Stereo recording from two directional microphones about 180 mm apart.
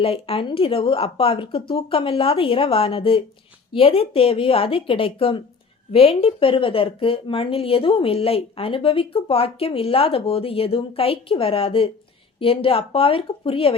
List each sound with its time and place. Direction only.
0.0 s a woman's voice: 30° left (ahead or behind)